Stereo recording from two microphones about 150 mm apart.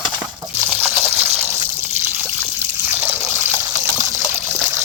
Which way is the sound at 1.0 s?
15° right (ahead or behind).